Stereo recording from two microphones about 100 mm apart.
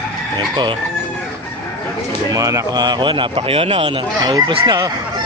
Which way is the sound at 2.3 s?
35° right (ahead or behind).